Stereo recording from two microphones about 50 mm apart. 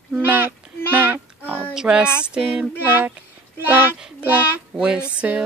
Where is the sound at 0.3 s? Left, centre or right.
Right.